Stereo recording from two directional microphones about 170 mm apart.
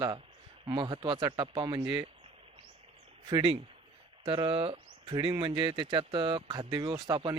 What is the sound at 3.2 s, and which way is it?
Speech, 30° right (ahead or behind).